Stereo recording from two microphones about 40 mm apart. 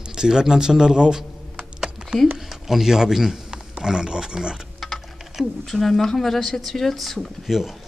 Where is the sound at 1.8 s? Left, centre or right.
Centre.